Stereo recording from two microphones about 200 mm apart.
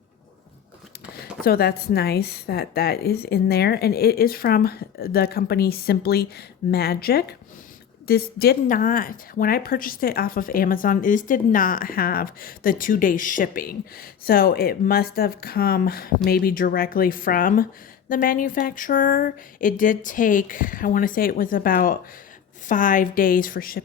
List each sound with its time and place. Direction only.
1.5 s speech: 50° left (ahead or behind)